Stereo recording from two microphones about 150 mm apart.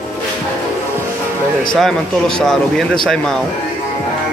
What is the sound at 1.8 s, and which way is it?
A man's voice, 5° left (ahead or behind).